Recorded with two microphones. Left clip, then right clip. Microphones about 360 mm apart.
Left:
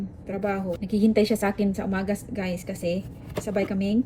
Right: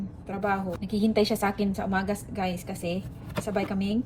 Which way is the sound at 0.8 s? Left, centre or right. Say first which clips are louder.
Left 5 dB; centre.